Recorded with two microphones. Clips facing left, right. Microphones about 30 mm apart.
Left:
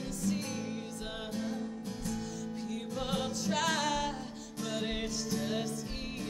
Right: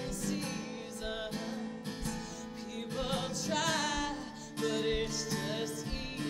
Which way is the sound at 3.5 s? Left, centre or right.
Centre.